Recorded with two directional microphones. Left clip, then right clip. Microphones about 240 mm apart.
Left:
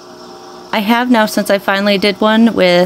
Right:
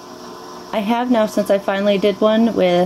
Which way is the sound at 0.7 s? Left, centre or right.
Left.